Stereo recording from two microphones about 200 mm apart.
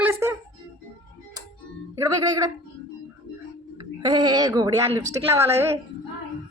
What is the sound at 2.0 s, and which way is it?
Speech, 20° right (ahead or behind).